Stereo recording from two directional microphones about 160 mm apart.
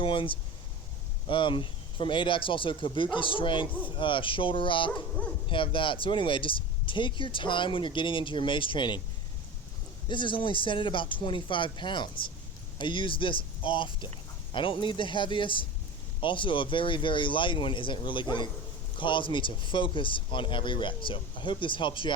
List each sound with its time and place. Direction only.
0.0 s speech: 35° left (ahead or behind)
10.1 s speech: 30° left (ahead or behind)